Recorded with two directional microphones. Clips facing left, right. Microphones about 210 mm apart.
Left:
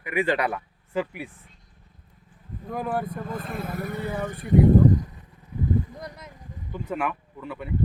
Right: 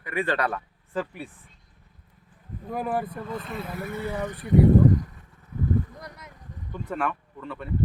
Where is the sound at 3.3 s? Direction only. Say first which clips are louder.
Left 1 dB; 50° left (ahead or behind).